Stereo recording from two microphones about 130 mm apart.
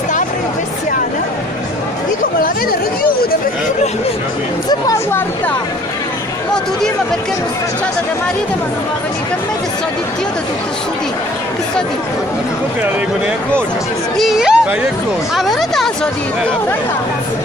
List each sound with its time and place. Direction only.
4.6 s speech: 25° left (ahead or behind)
14.1 s speech: centre (ahead or behind)